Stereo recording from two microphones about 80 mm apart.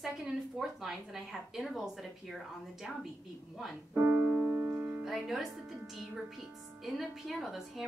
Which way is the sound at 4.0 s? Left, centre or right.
Right.